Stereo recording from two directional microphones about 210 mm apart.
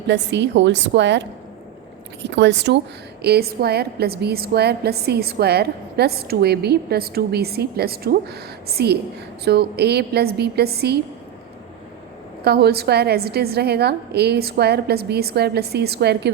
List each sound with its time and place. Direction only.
0.1 s a woman's voice: 55° right (ahead or behind)
12.5 s a woman's voice: 50° right (ahead or behind)